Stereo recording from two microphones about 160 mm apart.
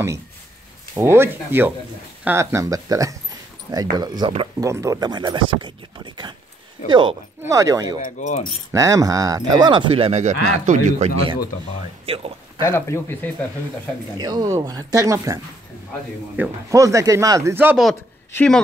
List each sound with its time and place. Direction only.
0.9 s speech: 15° right (ahead or behind)
8.0 s speech: 45° left (ahead or behind)
8.7 s speech: 20° right (ahead or behind); by 11.1 s 50° right (ahead or behind)
12.1 s speech: 35° right (ahead or behind)
12.6 s speech: 15° left (ahead or behind)
14.1 s speech: 25° right (ahead or behind)
18.3 s speech: 5° left (ahead or behind)